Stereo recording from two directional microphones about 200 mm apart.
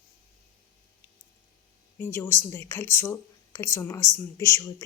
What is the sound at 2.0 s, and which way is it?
Speech, 10° left (ahead or behind).